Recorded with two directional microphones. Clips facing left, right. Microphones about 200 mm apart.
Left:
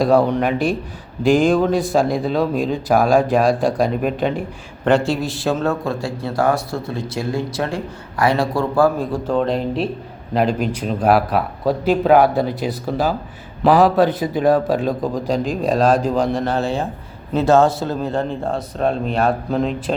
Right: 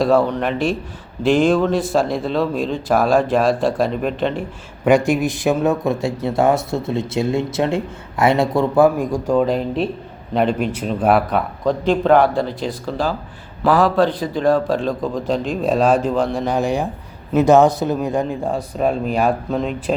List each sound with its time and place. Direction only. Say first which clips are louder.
0.2 s speech: left 1 dB; 10° left (ahead or behind)
4.9 s a man's voice: right 2 dB; 15° right (ahead or behind); by 12.8 s 10° left (ahead or behind)
13.8 s speech: left 1 dB; 5° left (ahead or behind)